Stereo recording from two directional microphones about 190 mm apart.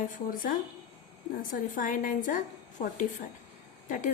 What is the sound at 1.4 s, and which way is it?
A woman's voice, 45° left (ahead or behind).